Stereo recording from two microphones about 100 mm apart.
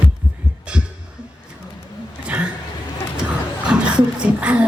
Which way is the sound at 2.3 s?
10° right (ahead or behind).